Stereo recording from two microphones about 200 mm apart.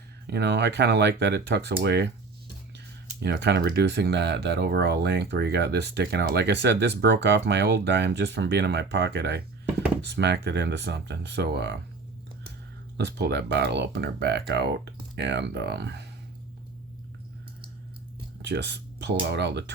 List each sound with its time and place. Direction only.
0.3 s speech: 60° right (ahead or behind)
13.0 s speech: 55° right (ahead or behind)
18.4 s speech: 60° right (ahead or behind)